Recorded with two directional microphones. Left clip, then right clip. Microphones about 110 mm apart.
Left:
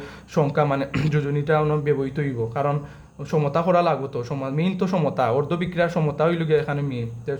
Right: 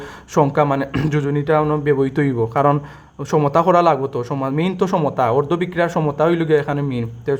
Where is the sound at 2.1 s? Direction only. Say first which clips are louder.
Right 8 dB; 35° right (ahead or behind).